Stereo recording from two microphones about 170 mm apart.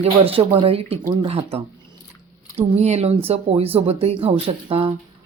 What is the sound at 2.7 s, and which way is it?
Speech, 40° right (ahead or behind).